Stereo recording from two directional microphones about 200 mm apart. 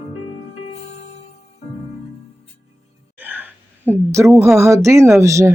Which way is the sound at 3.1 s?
10° right (ahead or behind).